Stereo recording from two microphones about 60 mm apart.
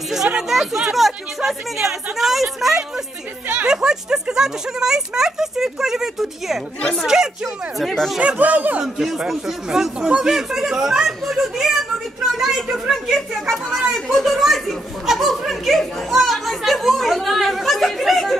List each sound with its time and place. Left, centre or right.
0.3 s speech: centre
3.4 s speech: right
3.7 s speech: centre
7.8 s speech: centre
8.2 s speech: right
8.8 s speech: centre